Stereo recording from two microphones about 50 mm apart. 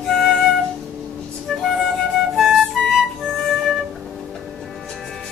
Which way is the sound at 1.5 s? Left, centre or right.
Centre.